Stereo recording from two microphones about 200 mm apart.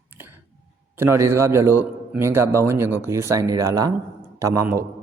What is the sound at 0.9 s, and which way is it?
A man's voice, 10° right (ahead or behind).